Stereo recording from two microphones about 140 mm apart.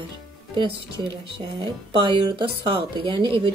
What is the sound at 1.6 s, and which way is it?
Speech, 35° right (ahead or behind).